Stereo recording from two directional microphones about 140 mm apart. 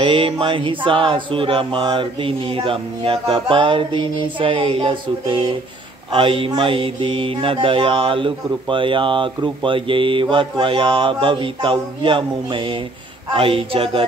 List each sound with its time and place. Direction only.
0.0 s mantra: 35° right (ahead or behind)